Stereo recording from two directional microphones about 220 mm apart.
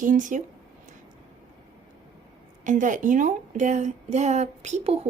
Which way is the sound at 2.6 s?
35° right (ahead or behind).